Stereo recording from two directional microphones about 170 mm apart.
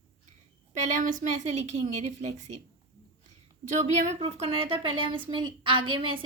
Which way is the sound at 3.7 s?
40° right (ahead or behind).